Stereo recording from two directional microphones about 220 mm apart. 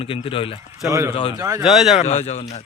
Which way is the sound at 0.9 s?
15° right (ahead or behind).